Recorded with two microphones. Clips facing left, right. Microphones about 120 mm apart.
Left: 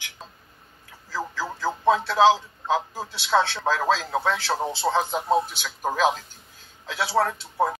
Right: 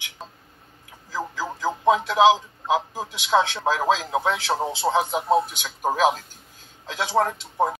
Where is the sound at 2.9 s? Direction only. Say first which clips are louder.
Right 1 dB; 15° right (ahead or behind).